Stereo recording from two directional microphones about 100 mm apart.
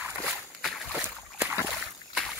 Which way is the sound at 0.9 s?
15° left (ahead or behind).